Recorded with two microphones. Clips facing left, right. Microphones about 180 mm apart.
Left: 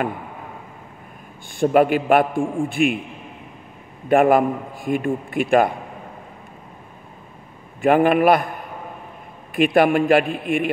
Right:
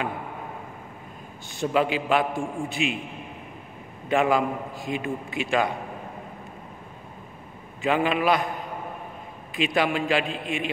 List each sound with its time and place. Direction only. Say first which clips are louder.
1.6 s a man's voice: left 8 dB; 55° left (ahead or behind)
4.1 s a man's voice: left 7 dB; 55° left (ahead or behind)
7.8 s a man's voice: left 8 dB; 55° left (ahead or behind)
9.8 s a man's voice: left 8 dB; 55° left (ahead or behind)